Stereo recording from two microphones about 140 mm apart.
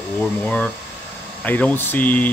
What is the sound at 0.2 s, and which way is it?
Speech, 10° left (ahead or behind).